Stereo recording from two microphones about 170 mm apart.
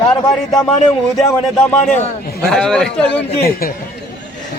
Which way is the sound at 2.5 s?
5° left (ahead or behind).